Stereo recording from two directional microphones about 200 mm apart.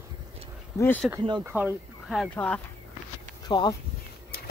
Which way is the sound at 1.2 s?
25° right (ahead or behind).